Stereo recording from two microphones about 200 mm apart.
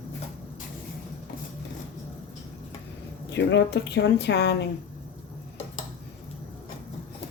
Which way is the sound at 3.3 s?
60° left (ahead or behind).